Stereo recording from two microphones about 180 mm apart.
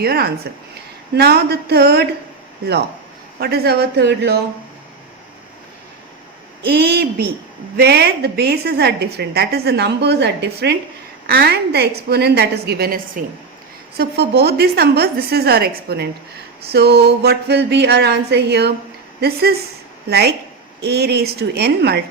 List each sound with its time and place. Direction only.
0.0 s a woman's voice: 60° right (ahead or behind)
3.4 s a woman's voice: 60° right (ahead or behind)
6.6 s a woman's voice: 65° right (ahead or behind)